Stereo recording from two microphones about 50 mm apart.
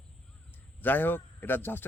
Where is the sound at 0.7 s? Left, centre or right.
Left.